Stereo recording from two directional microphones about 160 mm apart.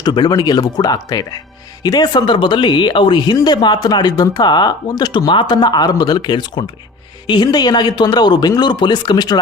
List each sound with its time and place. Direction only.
0.0 s speech: 25° left (ahead or behind)